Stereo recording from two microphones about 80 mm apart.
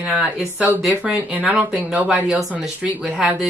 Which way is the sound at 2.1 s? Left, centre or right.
Centre.